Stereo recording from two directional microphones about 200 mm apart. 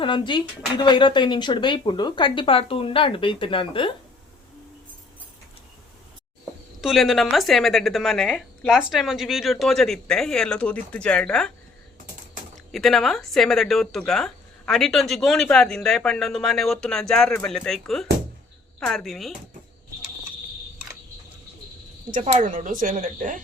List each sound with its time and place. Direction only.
0.0 s speech: 25° left (ahead or behind)
6.8 s a woman's voice: centre (ahead or behind)
12.7 s a woman's voice: centre (ahead or behind)
22.1 s speech: 40° right (ahead or behind)